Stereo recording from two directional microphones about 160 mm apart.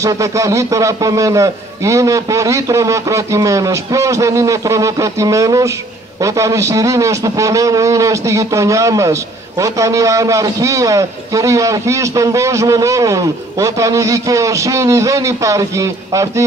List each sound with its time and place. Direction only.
0.0 s a man's voice: 20° right (ahead or behind)